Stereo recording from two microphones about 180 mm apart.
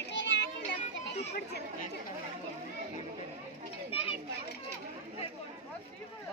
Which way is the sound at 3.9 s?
30° left (ahead or behind).